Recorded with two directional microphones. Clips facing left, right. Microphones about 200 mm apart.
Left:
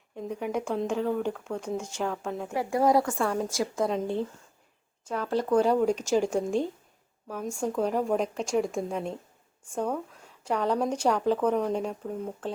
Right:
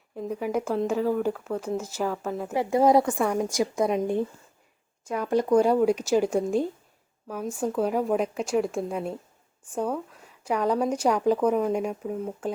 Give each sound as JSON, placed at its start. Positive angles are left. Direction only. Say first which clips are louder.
{"t": 0.2, "sound": "speech", "louder": "right 3 dB", "side_deg": -5}
{"t": 2.5, "sound": "a woman's voice", "louder": "right 4 dB", "side_deg": -20}